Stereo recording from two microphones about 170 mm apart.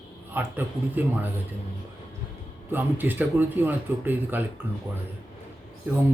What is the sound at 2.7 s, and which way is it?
Speech, 10° right (ahead or behind).